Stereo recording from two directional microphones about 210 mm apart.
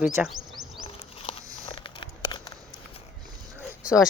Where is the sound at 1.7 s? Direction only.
20° left (ahead or behind).